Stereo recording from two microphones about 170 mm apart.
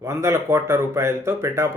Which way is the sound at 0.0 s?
15° right (ahead or behind).